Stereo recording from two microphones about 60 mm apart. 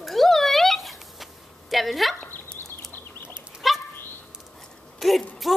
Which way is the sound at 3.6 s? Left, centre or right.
Centre.